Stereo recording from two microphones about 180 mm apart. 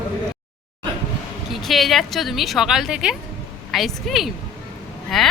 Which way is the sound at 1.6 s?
Centre (ahead or behind).